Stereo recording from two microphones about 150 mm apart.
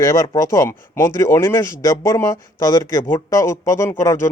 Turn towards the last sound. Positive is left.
turn(degrees=20)  # may be behind; listen again after turning